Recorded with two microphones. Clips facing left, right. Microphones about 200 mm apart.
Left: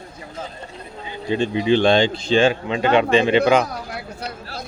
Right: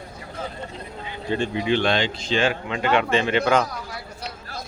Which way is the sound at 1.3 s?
20° left (ahead or behind).